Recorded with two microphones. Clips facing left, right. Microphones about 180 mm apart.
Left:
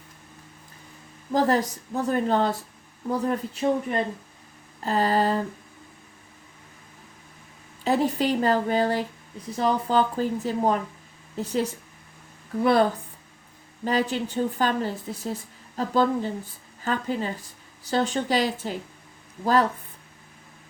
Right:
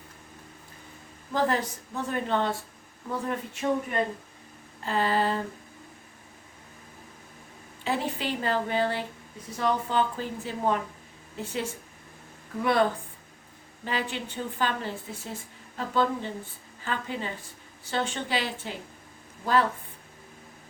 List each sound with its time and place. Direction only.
1.3 s speech: 40° left (ahead or behind)
7.9 s speech: 40° left (ahead or behind)
13.8 s speech: 40° left (ahead or behind)